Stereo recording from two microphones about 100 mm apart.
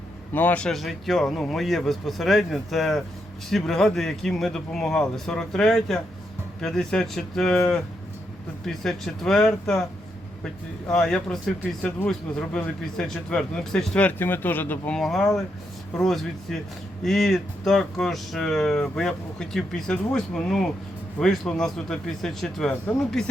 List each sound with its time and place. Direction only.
0.3 s speech: 15° left (ahead or behind)
0.7 s speech: centre (ahead or behind)
10.8 s speech: 5° left (ahead or behind)
14.9 s speech: centre (ahead or behind)